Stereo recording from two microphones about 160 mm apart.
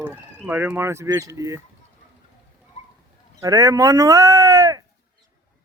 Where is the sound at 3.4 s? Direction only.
20° right (ahead or behind).